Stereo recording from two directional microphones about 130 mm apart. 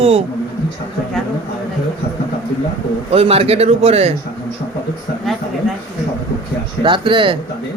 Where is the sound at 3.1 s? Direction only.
50° right (ahead or behind).